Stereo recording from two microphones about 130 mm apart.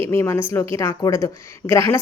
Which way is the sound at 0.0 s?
20° left (ahead or behind).